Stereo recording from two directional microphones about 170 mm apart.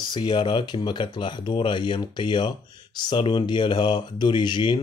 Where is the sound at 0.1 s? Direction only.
25° left (ahead or behind).